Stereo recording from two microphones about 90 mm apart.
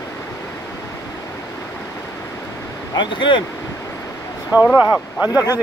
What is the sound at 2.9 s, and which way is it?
Speech, 60° left (ahead or behind).